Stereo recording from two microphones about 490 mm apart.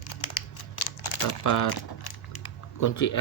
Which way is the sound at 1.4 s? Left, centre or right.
Left.